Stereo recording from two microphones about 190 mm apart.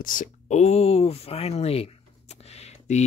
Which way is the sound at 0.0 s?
45° left (ahead or behind).